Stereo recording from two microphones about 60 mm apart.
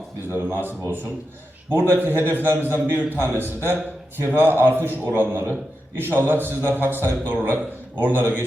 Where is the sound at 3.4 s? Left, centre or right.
Right.